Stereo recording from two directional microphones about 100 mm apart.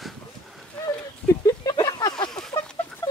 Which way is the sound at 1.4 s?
35° left (ahead or behind).